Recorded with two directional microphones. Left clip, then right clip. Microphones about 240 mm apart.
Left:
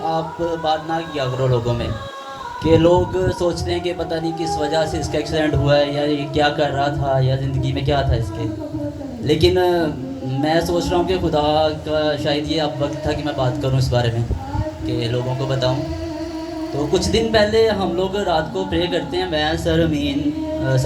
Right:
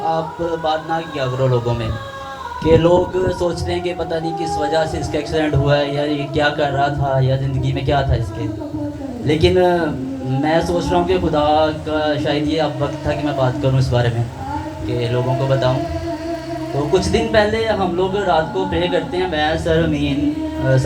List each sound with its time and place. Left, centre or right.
1.2 s a man's voice: left
9.2 s a man's voice: left
16.9 s a man's voice: left